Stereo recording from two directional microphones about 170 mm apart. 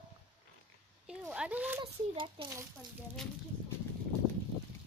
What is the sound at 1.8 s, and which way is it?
Speech, 30° right (ahead or behind).